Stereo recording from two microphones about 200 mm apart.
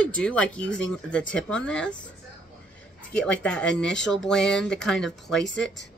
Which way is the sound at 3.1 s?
5° left (ahead or behind).